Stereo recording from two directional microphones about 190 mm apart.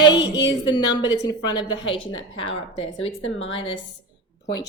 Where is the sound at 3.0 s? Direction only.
90° left.